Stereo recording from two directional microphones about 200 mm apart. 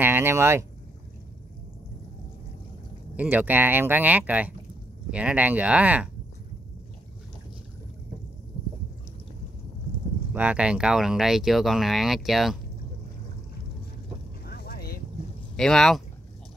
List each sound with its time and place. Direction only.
0.0 s speech: 10° right (ahead or behind)
3.2 s speech: 10° right (ahead or behind)
10.3 s speech: 5° right (ahead or behind)
14.4 s vehicle: 50° left (ahead or behind)
15.5 s speech: centre (ahead or behind)